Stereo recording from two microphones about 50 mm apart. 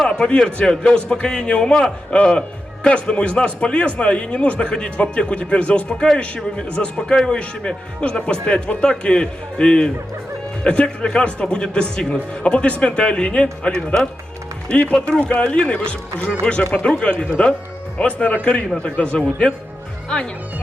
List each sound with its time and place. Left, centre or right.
0.2 s a man's voice: centre